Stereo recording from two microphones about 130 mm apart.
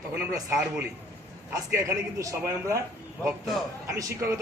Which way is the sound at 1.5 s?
25° right (ahead or behind).